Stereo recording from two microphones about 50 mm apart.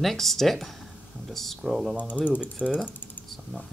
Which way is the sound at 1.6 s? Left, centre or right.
Centre.